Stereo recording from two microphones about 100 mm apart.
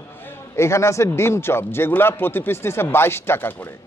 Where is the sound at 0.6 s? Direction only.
30° left (ahead or behind).